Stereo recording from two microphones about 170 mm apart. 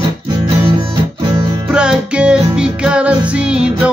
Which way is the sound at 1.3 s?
30° right (ahead or behind).